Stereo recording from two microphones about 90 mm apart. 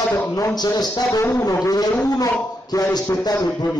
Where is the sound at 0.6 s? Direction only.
50° left (ahead or behind).